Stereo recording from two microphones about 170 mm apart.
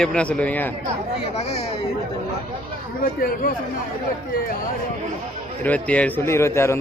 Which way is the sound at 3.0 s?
55° left (ahead or behind).